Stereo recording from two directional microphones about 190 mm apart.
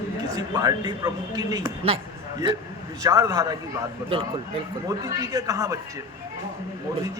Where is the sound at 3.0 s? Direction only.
20° right (ahead or behind).